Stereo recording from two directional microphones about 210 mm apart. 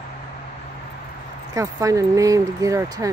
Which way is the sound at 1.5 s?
15° right (ahead or behind).